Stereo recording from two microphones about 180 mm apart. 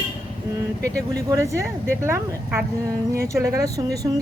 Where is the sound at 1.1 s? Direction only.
20° right (ahead or behind).